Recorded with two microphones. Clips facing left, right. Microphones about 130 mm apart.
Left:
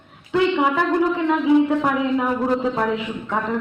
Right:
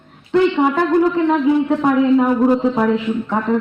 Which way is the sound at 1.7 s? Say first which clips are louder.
Right 6 dB; 15° right (ahead or behind).